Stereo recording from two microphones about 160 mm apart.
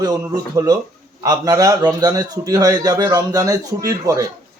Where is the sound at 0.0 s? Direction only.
25° right (ahead or behind).